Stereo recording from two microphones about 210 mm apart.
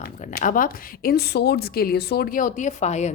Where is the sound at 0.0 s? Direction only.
40° left (ahead or behind).